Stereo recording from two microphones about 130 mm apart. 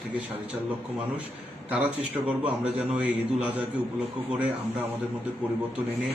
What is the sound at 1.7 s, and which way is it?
A man's voice, 10° right (ahead or behind).